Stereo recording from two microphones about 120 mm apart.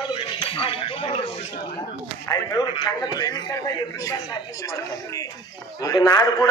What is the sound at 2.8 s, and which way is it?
A man's voice, 35° left (ahead or behind).